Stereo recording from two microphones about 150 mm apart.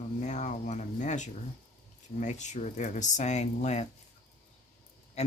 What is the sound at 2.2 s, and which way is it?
Speech, 50° left (ahead or behind).